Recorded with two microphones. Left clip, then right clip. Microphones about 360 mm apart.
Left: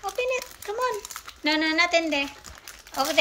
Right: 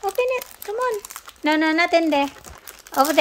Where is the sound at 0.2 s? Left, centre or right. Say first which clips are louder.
Right 3 dB; centre.